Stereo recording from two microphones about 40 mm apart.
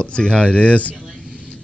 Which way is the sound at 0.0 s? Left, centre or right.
Left.